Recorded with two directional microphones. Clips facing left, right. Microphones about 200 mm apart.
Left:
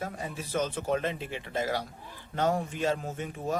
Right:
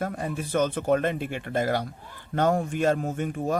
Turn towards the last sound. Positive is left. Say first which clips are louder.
# right 5 dB
turn(degrees=-55)  # may be behind; listen again after turning